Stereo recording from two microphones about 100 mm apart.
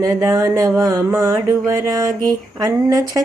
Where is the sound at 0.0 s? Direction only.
35° right (ahead or behind).